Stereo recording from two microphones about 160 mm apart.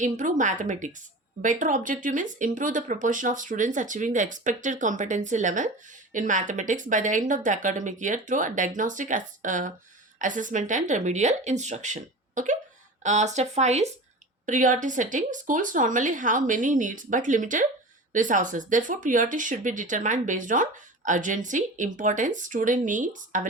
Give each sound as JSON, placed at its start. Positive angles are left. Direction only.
{"t": 0.0, "sound": "speech", "side_deg": -50}